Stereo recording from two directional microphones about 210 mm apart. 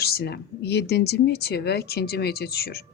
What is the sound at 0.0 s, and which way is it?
Speech, 50° left (ahead or behind).